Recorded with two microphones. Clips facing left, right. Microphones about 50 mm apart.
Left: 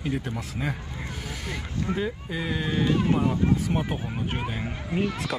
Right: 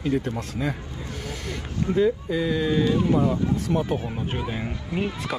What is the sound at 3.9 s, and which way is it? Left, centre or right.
Speech, left.